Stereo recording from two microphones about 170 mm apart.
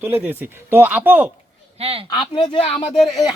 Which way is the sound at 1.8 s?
35° right (ahead or behind).